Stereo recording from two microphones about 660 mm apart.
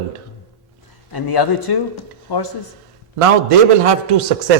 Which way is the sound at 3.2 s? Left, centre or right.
Right.